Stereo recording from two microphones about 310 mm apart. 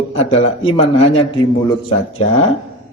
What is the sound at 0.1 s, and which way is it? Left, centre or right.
A man's voice, centre.